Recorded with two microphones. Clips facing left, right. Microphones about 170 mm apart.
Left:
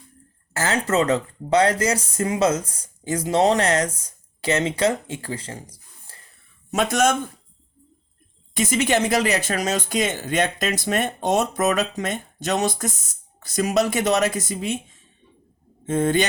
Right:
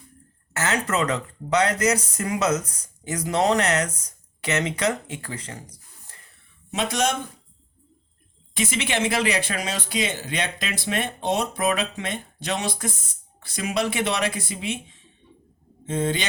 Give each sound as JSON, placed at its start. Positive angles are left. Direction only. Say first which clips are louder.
{"t": 0.5, "sound": "speech", "louder": "left 3 dB", "side_deg": 30}
{"t": 6.7, "sound": "speech", "louder": "left 4 dB", "side_deg": 50}
{"t": 8.5, "sound": "speech", "louder": "left 5 dB", "side_deg": 45}